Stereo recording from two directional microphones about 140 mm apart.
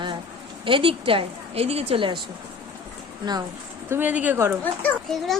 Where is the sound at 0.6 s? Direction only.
40° right (ahead or behind).